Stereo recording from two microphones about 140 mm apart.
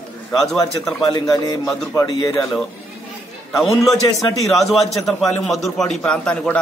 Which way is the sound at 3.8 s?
Centre (ahead or behind).